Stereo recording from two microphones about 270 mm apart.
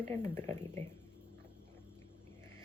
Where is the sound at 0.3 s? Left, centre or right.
Centre.